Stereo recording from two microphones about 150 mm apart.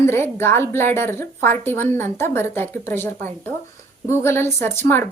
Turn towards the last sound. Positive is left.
turn(degrees=15)  # may be behind; listen again after turning